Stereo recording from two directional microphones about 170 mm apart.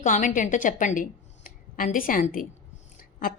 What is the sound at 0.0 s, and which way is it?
A woman's voice, 45° left (ahead or behind).